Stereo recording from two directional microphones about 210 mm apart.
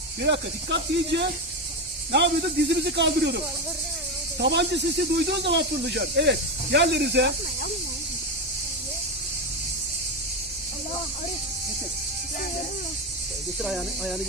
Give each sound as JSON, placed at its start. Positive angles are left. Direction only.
{"t": 0.2, "sound": "speech", "side_deg": -55}
{"t": 13.6, "sound": "speech", "side_deg": 0}